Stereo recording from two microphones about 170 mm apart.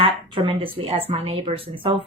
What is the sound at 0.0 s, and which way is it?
A woman's voice, 30° right (ahead or behind).